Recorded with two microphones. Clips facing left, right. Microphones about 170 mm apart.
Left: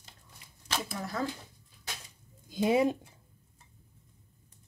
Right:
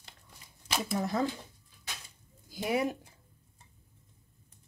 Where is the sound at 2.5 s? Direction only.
20° left (ahead or behind).